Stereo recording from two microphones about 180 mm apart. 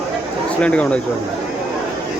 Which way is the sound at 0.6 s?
5° left (ahead or behind).